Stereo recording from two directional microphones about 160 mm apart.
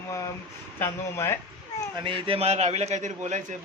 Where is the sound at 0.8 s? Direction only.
15° left (ahead or behind).